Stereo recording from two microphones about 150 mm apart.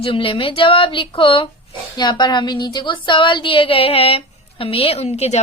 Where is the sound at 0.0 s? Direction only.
35° left (ahead or behind).